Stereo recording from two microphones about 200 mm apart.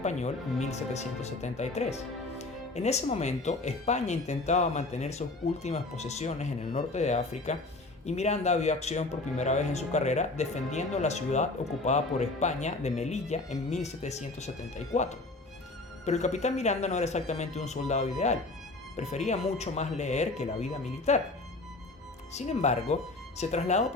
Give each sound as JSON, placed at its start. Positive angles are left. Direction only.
{"t": 0.0, "sound": "speech", "side_deg": 35}
{"t": 16.0, "sound": "speech", "side_deg": 35}
{"t": 22.3, "sound": "speech", "side_deg": 35}